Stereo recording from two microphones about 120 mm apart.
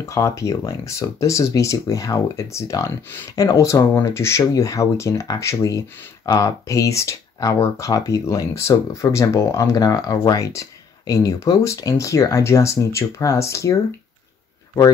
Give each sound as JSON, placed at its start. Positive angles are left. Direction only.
{"t": 0.0, "sound": "speech", "side_deg": 25}